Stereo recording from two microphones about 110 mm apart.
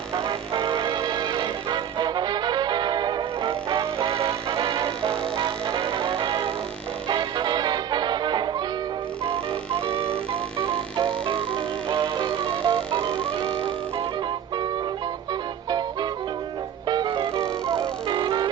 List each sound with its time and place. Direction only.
0.1 s music: 30° right (ahead or behind)
0.8 s music: 40° right (ahead or behind)
4.1 s music: 55° right (ahead or behind)
5.8 s music: 55° right (ahead or behind)
9.3 s music: 60° right (ahead or behind)
12.1 s music: 45° right (ahead or behind)
15.3 s music: 40° right (ahead or behind)
17.3 s music: 25° right (ahead or behind)
17.7 s music: 45° right (ahead or behind)